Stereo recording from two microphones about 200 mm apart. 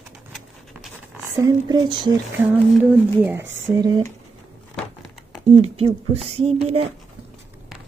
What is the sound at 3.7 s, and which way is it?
Speech, 20° right (ahead or behind).